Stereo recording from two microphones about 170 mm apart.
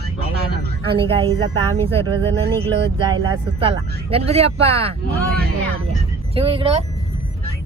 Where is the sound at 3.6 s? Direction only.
35° right (ahead or behind).